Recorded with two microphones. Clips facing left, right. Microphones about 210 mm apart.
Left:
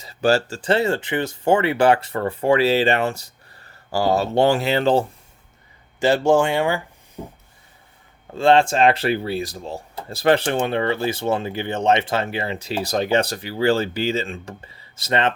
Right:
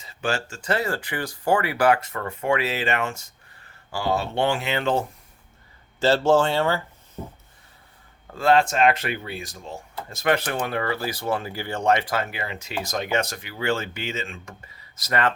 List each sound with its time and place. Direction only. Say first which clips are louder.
0.0 s speech: left 9 dB; 40° left (ahead or behind)
6.0 s speech: left 2 dB; 15° left (ahead or behind)
8.3 s speech: left 4 dB; 25° left (ahead or behind)